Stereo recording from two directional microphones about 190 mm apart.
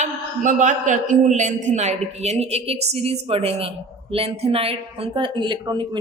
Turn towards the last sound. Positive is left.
turn(degrees=-20)  # may be behind; listen again after turning